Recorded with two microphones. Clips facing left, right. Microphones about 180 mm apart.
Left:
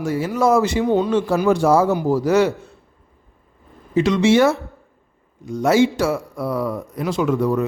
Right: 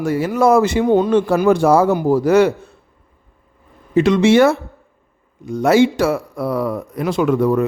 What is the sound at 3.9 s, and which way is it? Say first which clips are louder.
A man's voice: right 3 dB; 55° right (ahead or behind).